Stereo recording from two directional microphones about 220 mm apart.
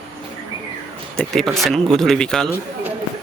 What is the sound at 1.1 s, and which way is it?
Speech, centre (ahead or behind).